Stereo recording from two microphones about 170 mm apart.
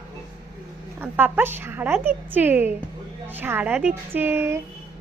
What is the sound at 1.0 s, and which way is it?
A woman's voice, 10° right (ahead or behind).